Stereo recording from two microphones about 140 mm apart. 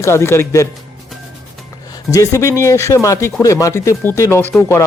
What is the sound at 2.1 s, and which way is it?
Speech, 20° left (ahead or behind).